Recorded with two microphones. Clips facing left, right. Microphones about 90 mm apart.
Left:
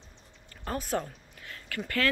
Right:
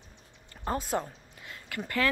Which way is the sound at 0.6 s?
25° right (ahead or behind).